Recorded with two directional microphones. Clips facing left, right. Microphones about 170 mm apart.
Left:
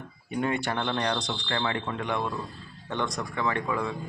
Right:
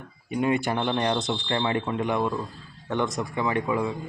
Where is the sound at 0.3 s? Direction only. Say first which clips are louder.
Right 4 dB; 15° right (ahead or behind).